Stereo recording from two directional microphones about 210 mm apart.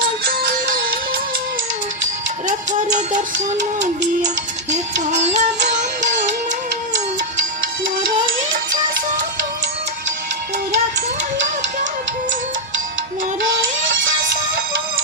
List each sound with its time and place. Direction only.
0.3 s music: 45° right (ahead or behind)
2.5 s music: 35° right (ahead or behind)
4.7 s music: 35° right (ahead or behind)